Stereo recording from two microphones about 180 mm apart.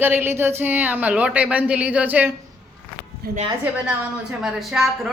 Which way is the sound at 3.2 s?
60° right (ahead or behind).